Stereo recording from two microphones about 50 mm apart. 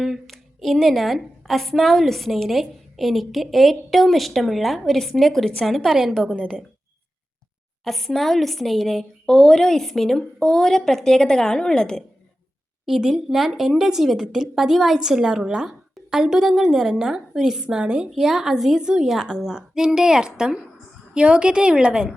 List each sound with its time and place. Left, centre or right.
0.0 s a woman's voice: centre
6.3 s a woman's voice: centre
7.9 s a woman's voice: centre
9.2 s a woman's voice: centre
12.8 s a woman's voice: centre